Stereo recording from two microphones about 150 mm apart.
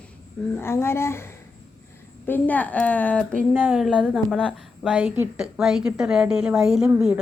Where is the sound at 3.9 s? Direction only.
5° left (ahead or behind).